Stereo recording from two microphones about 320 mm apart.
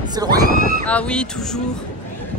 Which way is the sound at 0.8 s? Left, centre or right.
Centre.